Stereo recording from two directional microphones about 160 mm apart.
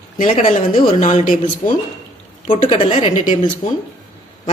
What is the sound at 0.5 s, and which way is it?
Speech, 55° left (ahead or behind).